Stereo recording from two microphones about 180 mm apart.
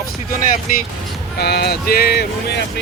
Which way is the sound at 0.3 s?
50° left (ahead or behind).